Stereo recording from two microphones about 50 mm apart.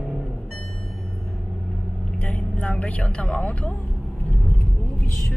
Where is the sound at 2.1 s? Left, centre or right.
Left.